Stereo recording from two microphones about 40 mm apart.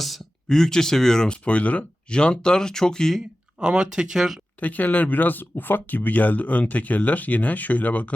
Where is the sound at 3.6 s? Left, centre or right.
Centre.